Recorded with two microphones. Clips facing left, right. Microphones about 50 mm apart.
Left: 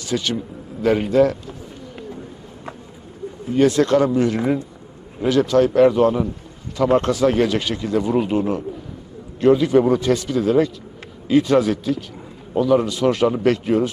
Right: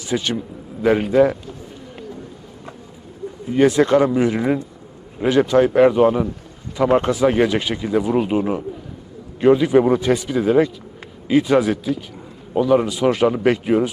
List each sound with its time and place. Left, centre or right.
0.0 s a man's voice: centre
3.5 s speech: centre